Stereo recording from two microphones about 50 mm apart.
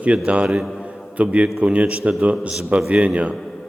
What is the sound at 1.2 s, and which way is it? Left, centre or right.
Speech, right.